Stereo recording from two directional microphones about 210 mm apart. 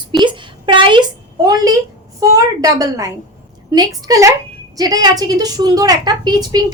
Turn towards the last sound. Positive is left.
turn(degrees=-20)  # may be behind; listen again after turning